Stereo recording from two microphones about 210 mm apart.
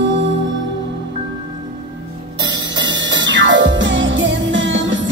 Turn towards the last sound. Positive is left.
turn(degrees=-60)  # may be behind; listen again after turning